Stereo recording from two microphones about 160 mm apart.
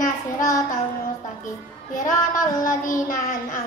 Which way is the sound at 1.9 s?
55° left (ahead or behind).